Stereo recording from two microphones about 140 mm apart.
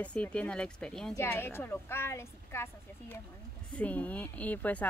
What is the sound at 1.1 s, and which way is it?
Speech, 20° left (ahead or behind).